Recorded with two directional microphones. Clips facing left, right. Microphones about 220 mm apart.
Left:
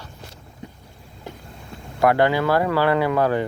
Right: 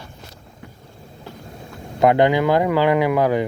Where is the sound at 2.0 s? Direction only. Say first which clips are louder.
Right 3 dB; 20° right (ahead or behind).